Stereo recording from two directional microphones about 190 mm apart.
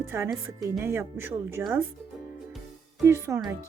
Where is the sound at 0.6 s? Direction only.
15° right (ahead or behind).